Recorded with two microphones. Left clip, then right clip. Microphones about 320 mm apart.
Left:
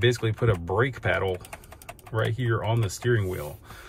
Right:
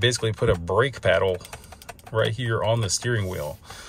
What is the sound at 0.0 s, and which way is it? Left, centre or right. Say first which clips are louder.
Speech: right 2 dB; centre.